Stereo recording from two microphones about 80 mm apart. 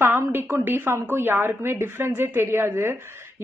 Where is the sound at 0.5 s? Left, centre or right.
Right.